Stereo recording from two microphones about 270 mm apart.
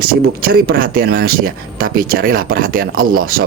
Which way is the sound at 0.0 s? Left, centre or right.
Right.